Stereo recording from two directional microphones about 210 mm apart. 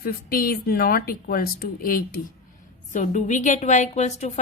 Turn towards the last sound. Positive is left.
turn(degrees=30)  # may be behind; listen again after turning